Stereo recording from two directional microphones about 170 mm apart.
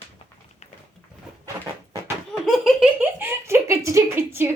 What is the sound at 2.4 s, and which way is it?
Giggle, centre (ahead or behind).